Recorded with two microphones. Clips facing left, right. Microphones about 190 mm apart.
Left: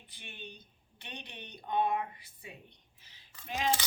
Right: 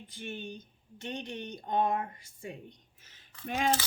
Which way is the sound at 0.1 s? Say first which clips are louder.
Right 9 dB; 45° right (ahead or behind).